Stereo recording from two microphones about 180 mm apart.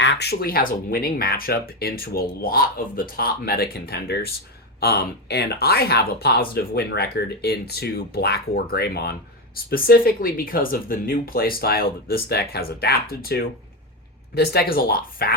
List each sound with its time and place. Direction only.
0.0 s speech: 75° left (ahead or behind); by 15.4 s 55° left (ahead or behind)